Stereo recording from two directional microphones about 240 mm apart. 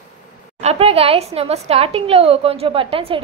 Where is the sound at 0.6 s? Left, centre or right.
Right.